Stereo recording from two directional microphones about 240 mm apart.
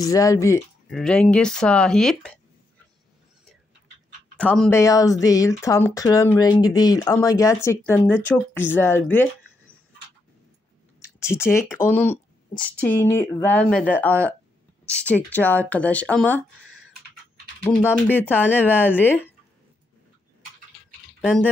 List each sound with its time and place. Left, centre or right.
0.0 s speech: centre
0.8 s speech: centre
4.4 s speech: centre
11.0 s speech: centre
18.1 s speech: centre
21.2 s speech: centre